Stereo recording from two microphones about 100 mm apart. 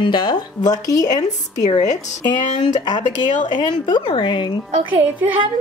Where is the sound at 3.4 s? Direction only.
50° left (ahead or behind).